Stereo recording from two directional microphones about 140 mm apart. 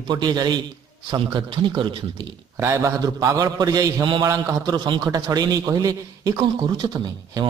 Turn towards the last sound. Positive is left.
turn(degrees=-25)  # may be behind; listen again after turning